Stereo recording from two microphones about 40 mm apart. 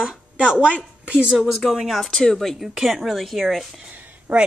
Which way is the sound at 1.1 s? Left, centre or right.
Right.